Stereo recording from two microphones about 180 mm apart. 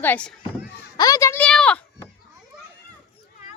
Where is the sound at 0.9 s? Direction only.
20° left (ahead or behind).